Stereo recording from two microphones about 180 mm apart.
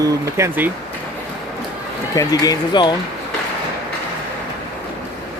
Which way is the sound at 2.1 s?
20° left (ahead or behind).